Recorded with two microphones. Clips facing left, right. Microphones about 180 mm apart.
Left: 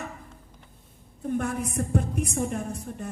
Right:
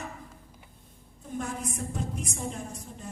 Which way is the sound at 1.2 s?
60° left (ahead or behind).